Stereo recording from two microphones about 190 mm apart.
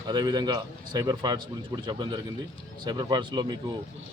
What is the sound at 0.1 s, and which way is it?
A man's voice, 20° right (ahead or behind).